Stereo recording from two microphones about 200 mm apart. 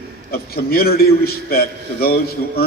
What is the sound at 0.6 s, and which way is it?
A man's voice, 50° left (ahead or behind).